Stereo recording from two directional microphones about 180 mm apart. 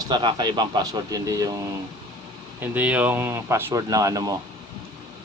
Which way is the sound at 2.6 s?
10° right (ahead or behind).